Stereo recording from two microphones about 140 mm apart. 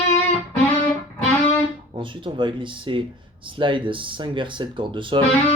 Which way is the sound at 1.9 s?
35° right (ahead or behind).